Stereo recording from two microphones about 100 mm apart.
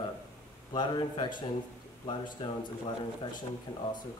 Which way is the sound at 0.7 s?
50° left (ahead or behind).